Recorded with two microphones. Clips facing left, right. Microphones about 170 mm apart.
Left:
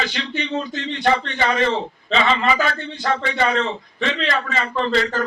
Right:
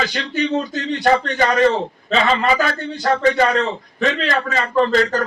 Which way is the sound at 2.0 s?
40° right (ahead or behind).